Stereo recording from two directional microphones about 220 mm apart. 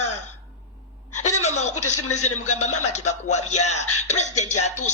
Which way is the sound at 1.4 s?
30° left (ahead or behind).